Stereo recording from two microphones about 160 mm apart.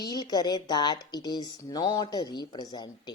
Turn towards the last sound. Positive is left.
turn(degrees=25)  # may be behind; listen again after turning